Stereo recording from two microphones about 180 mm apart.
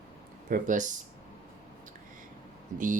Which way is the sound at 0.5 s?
45° right (ahead or behind).